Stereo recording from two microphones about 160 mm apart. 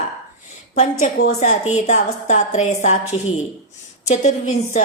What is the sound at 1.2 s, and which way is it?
A woman's voice, 45° left (ahead or behind).